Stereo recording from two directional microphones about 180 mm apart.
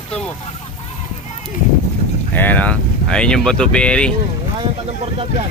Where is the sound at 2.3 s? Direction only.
10° left (ahead or behind).